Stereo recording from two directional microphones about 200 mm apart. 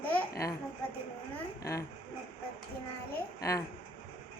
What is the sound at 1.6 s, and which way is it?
Speech, 15° left (ahead or behind).